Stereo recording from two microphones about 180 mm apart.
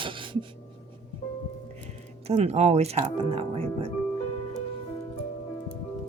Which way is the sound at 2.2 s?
35° right (ahead or behind).